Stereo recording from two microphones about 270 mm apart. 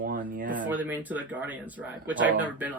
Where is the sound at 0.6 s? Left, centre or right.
Centre.